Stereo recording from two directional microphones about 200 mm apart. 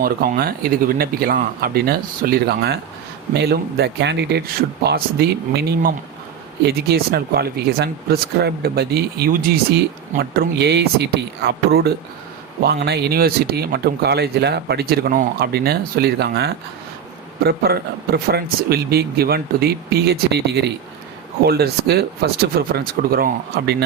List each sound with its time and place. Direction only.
0.0 s speech: 45° right (ahead or behind)